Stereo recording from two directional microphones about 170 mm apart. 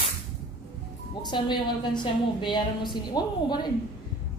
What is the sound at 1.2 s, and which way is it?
A woman's voice, 25° left (ahead or behind).